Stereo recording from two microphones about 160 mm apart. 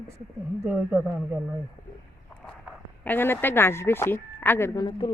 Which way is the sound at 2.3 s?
5° left (ahead or behind).